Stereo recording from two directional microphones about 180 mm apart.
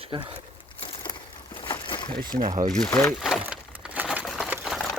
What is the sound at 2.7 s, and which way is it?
Speech, 5° left (ahead or behind).